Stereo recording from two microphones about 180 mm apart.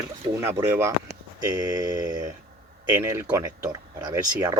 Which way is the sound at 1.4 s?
20° right (ahead or behind).